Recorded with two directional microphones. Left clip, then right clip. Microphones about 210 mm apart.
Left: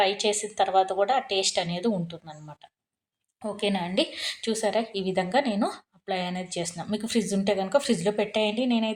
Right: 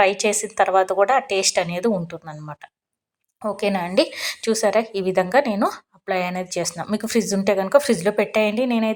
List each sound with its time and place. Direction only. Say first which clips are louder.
0.2 s a woman's voice: right 6 dB; 15° right (ahead or behind)